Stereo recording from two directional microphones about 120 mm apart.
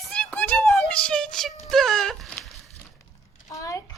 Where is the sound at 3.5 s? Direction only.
30° left (ahead or behind).